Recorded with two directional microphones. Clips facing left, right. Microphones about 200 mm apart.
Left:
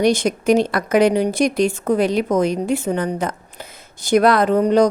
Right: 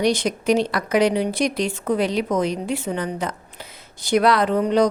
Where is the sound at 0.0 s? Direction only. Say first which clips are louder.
Left 4 dB; 50° left (ahead or behind).